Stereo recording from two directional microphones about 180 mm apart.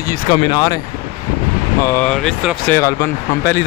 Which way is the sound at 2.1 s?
Centre (ahead or behind).